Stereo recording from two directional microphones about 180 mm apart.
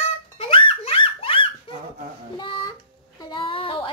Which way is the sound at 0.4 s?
30° left (ahead or behind).